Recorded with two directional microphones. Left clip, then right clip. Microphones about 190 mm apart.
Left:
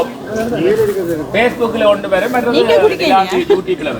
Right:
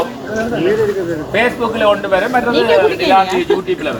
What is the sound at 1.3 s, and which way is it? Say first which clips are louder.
Speech: left 1 dB; 15° left (ahead or behind).